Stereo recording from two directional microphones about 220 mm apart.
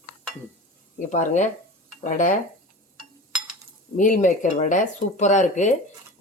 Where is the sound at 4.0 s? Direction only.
35° left (ahead or behind).